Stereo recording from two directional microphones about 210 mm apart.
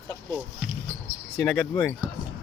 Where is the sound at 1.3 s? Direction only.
5° left (ahead or behind).